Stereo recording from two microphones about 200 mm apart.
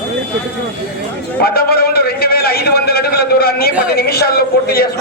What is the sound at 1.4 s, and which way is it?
A man's voice, 50° left (ahead or behind).